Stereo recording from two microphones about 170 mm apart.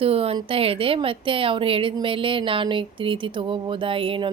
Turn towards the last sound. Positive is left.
turn(degrees=-30)  # may be behind; listen again after turning